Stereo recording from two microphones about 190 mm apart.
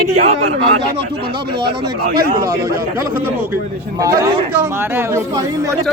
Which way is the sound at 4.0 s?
20° right (ahead or behind).